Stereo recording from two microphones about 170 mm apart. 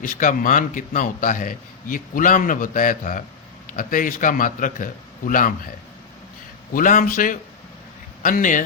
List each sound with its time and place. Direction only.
0.0 s a man's voice: 50° left (ahead or behind)
6.7 s a man's voice: 50° left (ahead or behind)